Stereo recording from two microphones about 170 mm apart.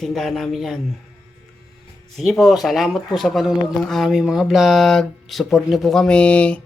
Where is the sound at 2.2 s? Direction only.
Centre (ahead or behind).